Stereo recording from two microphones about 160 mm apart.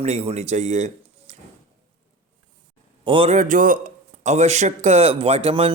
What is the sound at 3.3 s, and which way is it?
A man's voice, 55° right (ahead or behind).